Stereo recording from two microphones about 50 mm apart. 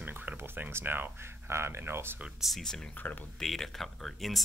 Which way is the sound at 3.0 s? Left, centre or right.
Left.